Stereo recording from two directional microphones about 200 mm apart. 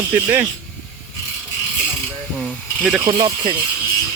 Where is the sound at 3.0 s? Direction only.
20° right (ahead or behind).